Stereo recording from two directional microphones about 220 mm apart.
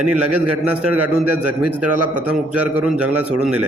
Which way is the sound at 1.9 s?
90° right.